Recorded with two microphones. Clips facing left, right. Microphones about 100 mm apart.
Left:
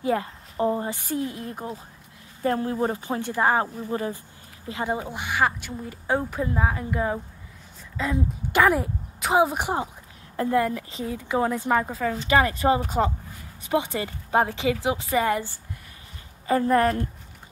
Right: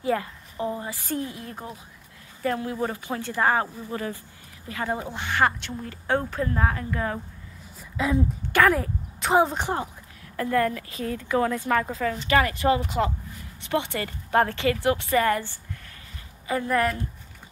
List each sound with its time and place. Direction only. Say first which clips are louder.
0.0 s a woman's voice: left 1 dB; 25° left (ahead or behind)
1.0 s speech: left 2 dB; 15° left (ahead or behind)
2.4 s speech: left 3 dB; 35° left (ahead or behind)
3.2 s speech: even; 20° left (ahead or behind)
5.1 s speech: right 3 dB; 10° left (ahead or behind)
8.0 s speech: right 2 dB; 5° right (ahead or behind)
8.5 s speech: left 1 dB; 15° left (ahead or behind)
9.2 s speech: even; 5° left (ahead or behind)
11.9 s speech: even; 10° left (ahead or behind)
12.3 s speech: left 1 dB; 25° left (ahead or behind)
16.4 s speech: left 4 dB; 35° left (ahead or behind)